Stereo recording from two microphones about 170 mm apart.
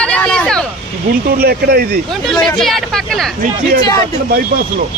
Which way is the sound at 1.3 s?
65° right (ahead or behind).